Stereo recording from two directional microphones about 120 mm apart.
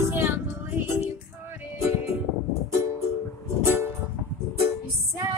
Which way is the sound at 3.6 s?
20° right (ahead or behind).